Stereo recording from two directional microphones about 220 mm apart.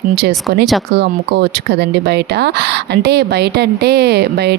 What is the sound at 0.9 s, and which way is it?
Speech, 50° right (ahead or behind).